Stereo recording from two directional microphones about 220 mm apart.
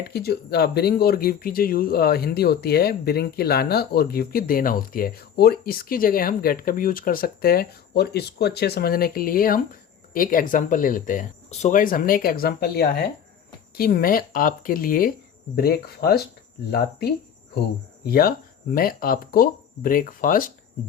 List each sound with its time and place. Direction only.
0.0 s speech: 45° left (ahead or behind)
18.0 s speech: 45° left (ahead or behind)